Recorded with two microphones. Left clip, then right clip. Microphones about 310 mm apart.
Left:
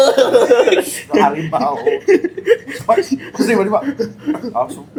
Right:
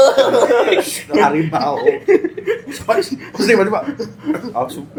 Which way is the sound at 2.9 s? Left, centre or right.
Right.